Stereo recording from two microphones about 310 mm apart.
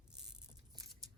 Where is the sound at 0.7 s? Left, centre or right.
Centre.